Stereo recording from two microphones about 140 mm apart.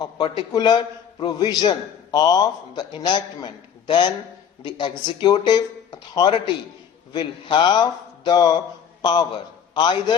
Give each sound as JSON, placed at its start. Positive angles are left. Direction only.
{"t": 0.0, "sound": "a man's voice", "side_deg": 30}